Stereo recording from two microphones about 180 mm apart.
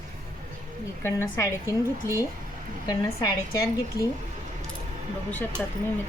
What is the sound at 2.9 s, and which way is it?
Speech, 20° left (ahead or behind).